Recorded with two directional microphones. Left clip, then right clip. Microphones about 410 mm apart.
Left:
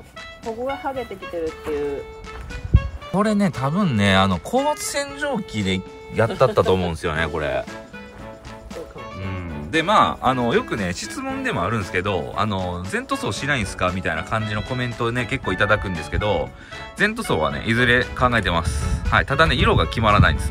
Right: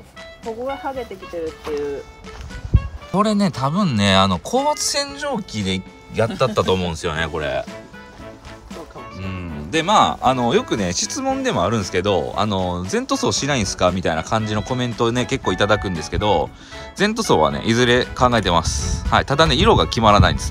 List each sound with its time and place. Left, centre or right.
0.7 s speech: centre
9.3 s speech: centre